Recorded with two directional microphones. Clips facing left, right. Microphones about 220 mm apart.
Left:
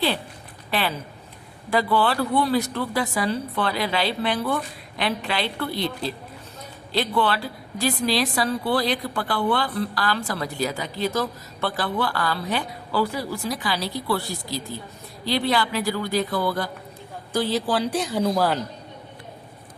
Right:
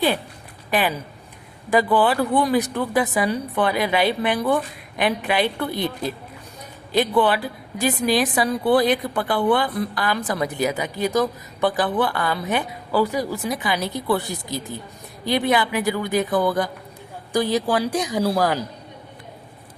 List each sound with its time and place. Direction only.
0.7 s a woman's voice: 15° right (ahead or behind)